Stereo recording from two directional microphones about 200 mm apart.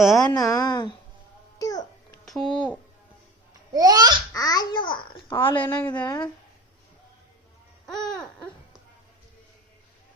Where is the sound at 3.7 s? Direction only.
20° right (ahead or behind).